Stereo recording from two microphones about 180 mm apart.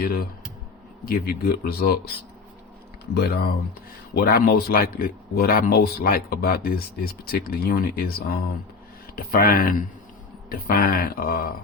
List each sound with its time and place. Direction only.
0.0 s speech: 55° left (ahead or behind)
3.2 s speech: 60° left (ahead or behind)